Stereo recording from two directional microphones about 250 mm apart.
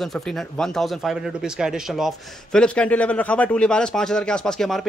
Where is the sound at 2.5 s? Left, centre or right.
Centre.